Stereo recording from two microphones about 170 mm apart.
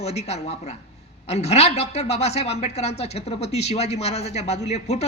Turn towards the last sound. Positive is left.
turn(degrees=40)  # may be behind; listen again after turning